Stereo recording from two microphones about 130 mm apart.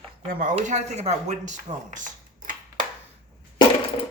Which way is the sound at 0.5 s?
60° right (ahead or behind).